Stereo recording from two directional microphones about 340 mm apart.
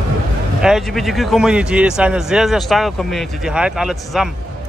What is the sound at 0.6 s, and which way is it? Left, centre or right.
A man's voice, centre.